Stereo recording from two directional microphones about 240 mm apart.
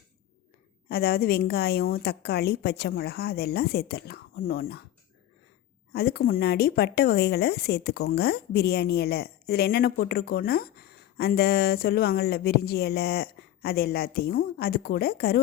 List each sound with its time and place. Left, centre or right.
0.9 s speech: left
5.9 s speech: left